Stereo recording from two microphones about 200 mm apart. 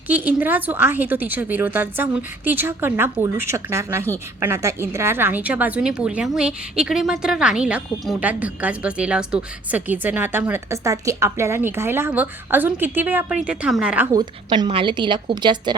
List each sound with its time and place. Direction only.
0.1 s a woman's voice: 10° right (ahead or behind)
14.2 s a woman's voice: 20° right (ahead or behind)